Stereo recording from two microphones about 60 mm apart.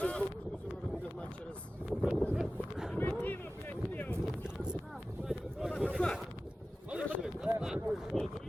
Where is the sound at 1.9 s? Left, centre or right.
Centre.